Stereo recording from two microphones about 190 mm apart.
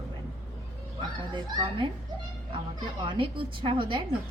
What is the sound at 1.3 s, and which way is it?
Speech, 25° right (ahead or behind).